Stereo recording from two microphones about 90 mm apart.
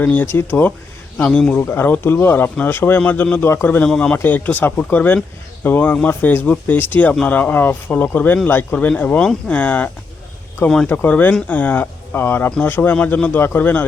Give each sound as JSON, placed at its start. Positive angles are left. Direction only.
{"t": 0.0, "sound": "speech", "side_deg": 20}
{"t": 1.5, "sound": "speech", "side_deg": 25}
{"t": 3.8, "sound": "speech", "side_deg": 10}
{"t": 4.2, "sound": "speech", "side_deg": 20}